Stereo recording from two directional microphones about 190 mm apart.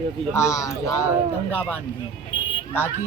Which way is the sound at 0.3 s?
15° left (ahead or behind).